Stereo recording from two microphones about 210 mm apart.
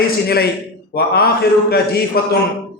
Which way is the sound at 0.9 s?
50° left (ahead or behind).